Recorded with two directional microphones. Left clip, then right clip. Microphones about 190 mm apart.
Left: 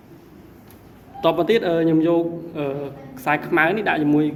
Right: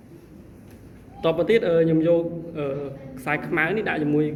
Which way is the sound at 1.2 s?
50° left (ahead or behind).